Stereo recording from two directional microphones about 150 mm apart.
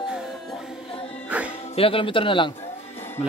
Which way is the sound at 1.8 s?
35° left (ahead or behind).